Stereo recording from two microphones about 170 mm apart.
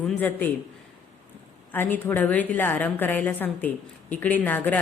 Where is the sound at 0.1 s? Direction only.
10° left (ahead or behind).